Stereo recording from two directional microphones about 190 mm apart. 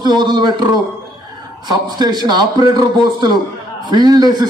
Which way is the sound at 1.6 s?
20° right (ahead or behind).